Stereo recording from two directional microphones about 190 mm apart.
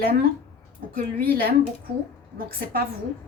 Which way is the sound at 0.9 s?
50° right (ahead or behind).